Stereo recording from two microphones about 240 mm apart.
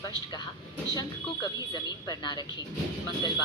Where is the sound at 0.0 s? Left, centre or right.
Centre.